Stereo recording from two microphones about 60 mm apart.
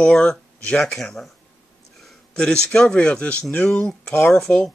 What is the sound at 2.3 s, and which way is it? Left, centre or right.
Speech, centre.